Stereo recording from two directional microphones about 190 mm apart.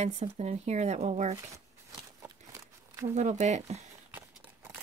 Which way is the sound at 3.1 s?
35° right (ahead or behind).